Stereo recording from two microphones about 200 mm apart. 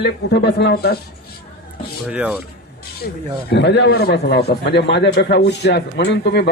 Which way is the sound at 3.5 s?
60° left (ahead or behind).